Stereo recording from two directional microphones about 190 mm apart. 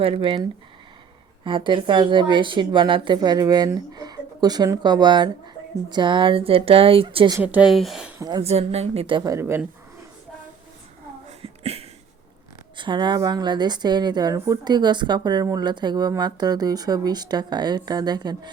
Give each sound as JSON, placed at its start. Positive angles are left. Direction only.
{"t": 0.0, "sound": "a woman's voice", "side_deg": -30}
{"t": 1.5, "sound": "a woman's voice", "side_deg": -25}
{"t": 7.3, "sound": "speech", "side_deg": -10}
{"t": 8.2, "sound": "a woman's voice", "side_deg": -15}
{"t": 8.4, "sound": "a woman's voice", "side_deg": -35}
{"t": 11.3, "sound": "a sound", "side_deg": -35}
{"t": 12.7, "sound": "a woman's voice", "side_deg": -25}